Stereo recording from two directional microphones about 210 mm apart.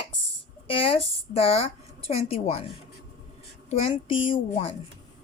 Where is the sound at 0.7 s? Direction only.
25° left (ahead or behind).